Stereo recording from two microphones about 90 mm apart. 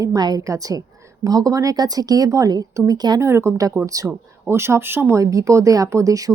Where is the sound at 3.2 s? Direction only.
30° right (ahead or behind).